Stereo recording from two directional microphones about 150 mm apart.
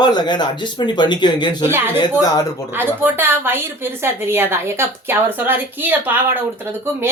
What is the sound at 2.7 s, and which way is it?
A woman's voice, 15° right (ahead or behind).